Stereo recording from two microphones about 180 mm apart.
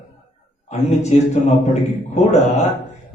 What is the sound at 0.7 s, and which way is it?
A man's voice, 40° left (ahead or behind).